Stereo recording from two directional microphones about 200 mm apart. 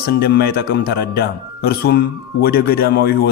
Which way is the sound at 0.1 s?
50° left (ahead or behind).